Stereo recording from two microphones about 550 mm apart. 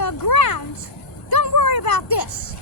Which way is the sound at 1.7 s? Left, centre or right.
Left.